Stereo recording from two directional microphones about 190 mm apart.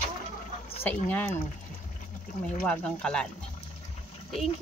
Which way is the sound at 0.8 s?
10° left (ahead or behind).